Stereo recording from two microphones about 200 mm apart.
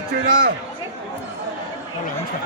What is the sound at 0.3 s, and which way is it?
Speech, 45° right (ahead or behind).